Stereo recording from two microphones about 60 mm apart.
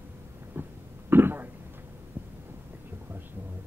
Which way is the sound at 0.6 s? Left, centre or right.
Right.